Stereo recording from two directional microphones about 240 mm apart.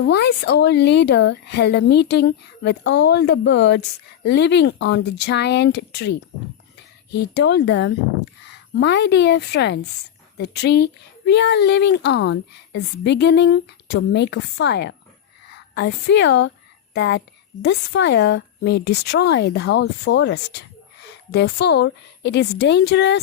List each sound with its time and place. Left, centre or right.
0.0 s speech: left
7.3 s speech: left